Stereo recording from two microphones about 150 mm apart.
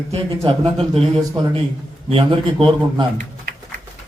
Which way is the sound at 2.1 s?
35° right (ahead or behind).